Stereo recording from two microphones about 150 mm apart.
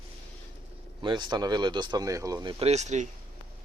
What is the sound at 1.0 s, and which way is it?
Speech, 30° right (ahead or behind).